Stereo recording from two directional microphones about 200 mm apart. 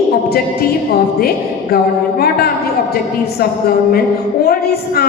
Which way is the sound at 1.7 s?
50° left (ahead or behind).